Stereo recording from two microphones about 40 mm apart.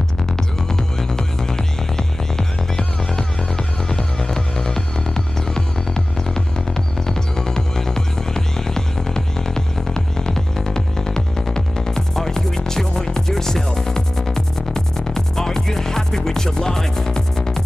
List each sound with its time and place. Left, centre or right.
0.7 s music: centre